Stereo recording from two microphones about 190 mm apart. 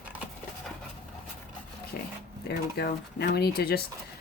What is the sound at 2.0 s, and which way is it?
Speech, 55° left (ahead or behind).